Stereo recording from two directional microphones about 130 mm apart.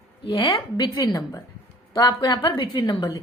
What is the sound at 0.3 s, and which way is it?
A woman's voice, 35° left (ahead or behind).